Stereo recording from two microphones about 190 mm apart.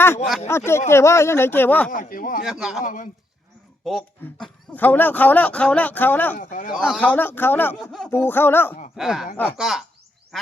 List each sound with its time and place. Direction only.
0.4 s speech: 15° left (ahead or behind)
1.9 s speech: 45° left (ahead or behind)
2.4 s a man's voice: centre (ahead or behind)
2.8 s speech: 45° left (ahead or behind)
3.8 s speech: centre (ahead or behind)
6.3 s speech: 45° left (ahead or behind)
6.7 s speech: centre (ahead or behind)
9.0 s a man's voice: 5° right (ahead or behind)